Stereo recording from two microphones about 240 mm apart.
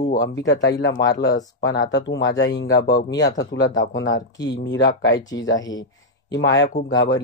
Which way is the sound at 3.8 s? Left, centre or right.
Left.